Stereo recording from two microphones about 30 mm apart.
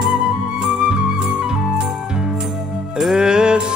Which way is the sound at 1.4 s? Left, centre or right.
Right.